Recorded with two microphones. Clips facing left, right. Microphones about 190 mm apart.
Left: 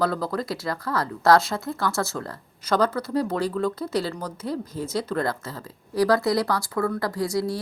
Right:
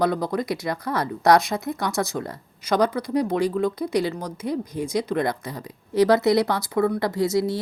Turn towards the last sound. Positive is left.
turn(degrees=-25)  # may be behind; listen again after turning